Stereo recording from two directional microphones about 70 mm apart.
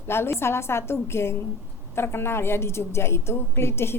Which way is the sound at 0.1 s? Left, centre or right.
Left.